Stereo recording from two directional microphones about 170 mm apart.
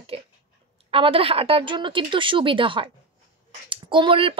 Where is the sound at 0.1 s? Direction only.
35° right (ahead or behind).